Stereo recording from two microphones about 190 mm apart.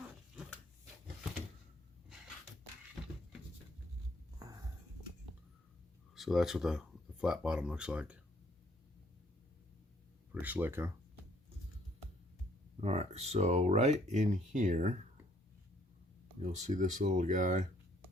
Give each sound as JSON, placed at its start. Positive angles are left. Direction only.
{"t": 4.4, "sound": "a sound", "side_deg": -20}
{"t": 6.1, "sound": "speech", "side_deg": 0}
{"t": 10.4, "sound": "speech", "side_deg": -10}
{"t": 12.8, "sound": "speech", "side_deg": -35}
{"t": 16.4, "sound": "speech", "side_deg": -40}